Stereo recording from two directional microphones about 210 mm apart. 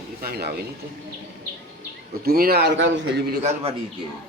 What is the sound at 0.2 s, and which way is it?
Speech, 50° right (ahead or behind).